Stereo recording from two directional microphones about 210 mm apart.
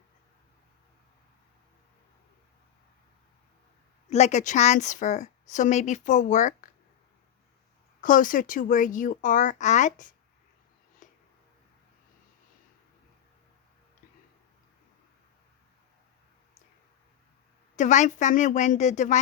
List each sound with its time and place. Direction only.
4.1 s a woman's voice: 35° left (ahead or behind)
8.0 s a woman's voice: 40° left (ahead or behind)
11.0 s a sound: 40° left (ahead or behind)
17.7 s a woman's voice: 35° left (ahead or behind)